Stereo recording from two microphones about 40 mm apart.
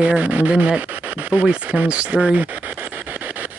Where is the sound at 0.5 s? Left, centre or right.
Right.